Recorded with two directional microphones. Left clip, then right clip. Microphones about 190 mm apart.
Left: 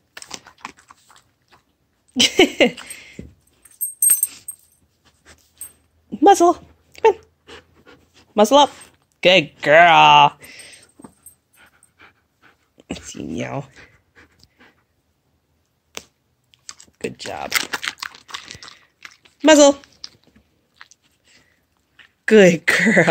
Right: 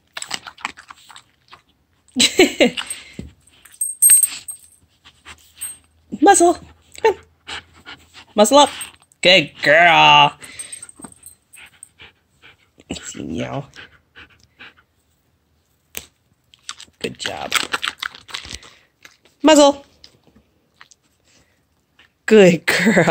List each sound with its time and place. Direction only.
0.3 s computer keyboard: centre (ahead or behind)
2.1 s speech: 5° left (ahead or behind)
2.7 s a sound: 10° left (ahead or behind)
5.0 s dog: 20° left (ahead or behind)
6.0 s a sound: centre (ahead or behind)
7.4 s pant: 10° right (ahead or behind)
12.0 s dog: 35° left (ahead or behind)
12.7 s dog: 5° left (ahead or behind)
13.1 s pant: 5° left (ahead or behind)
16.6 s typing: 20° left (ahead or behind)
17.5 s crunch: 20° left (ahead or behind)
18.9 s a sound: 10° left (ahead or behind)
22.2 s speech: centre (ahead or behind)